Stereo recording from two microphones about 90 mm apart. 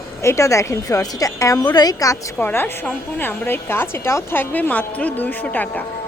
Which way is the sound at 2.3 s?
20° left (ahead or behind).